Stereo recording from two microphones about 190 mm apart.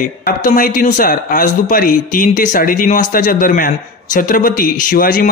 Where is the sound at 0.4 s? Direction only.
45° left (ahead or behind).